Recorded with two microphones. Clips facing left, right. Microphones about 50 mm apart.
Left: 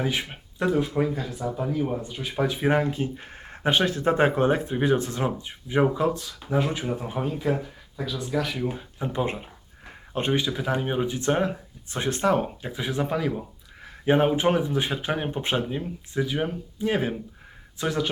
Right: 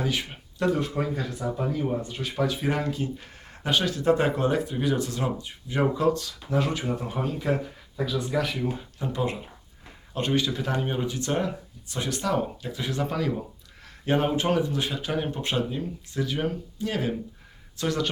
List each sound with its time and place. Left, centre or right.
0.0 s speech: left
2.4 s speech: left
7.4 s speech: centre
8.7 s speech: centre
10.4 s speech: centre